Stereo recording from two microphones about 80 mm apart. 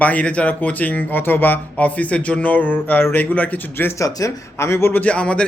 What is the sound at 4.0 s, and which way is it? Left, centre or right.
Speech, left.